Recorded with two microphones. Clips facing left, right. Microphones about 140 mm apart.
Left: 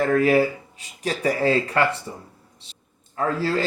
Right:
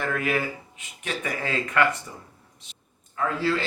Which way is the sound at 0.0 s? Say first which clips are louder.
Left 9 dB; 35° left (ahead or behind).